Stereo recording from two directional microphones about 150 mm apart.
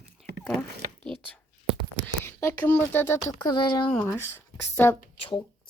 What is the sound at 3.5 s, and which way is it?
Speech, 30° left (ahead or behind).